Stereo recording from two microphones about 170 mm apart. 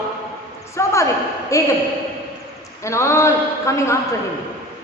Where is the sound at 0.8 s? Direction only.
15° left (ahead or behind).